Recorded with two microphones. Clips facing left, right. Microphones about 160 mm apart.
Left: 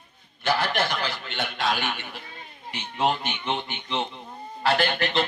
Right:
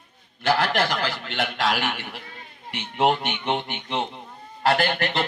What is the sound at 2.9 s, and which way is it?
Speech, 60° right (ahead or behind).